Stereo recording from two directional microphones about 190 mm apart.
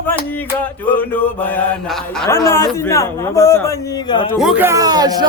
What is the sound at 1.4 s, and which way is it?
Mantra, 10° left (ahead or behind).